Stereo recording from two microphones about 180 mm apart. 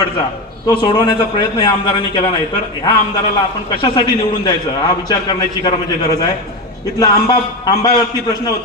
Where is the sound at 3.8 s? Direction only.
25° left (ahead or behind).